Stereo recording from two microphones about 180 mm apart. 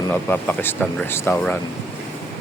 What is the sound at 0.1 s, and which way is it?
Speech, 10° left (ahead or behind).